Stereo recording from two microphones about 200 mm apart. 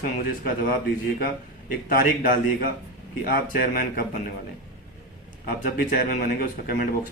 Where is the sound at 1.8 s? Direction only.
45° left (ahead or behind).